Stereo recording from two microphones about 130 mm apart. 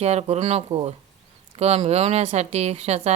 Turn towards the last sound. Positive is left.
turn(degrees=-55)  # may be behind; listen again after turning